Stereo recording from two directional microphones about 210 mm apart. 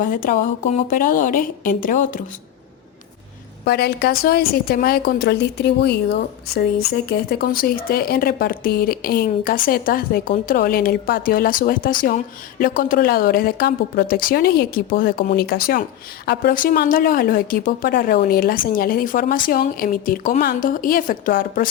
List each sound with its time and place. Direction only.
0.0 s speech: 40° left (ahead or behind)
3.6 s a woman's voice: 50° left (ahead or behind)